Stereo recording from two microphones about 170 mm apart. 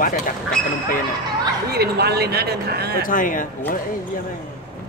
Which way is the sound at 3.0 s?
55° left (ahead or behind).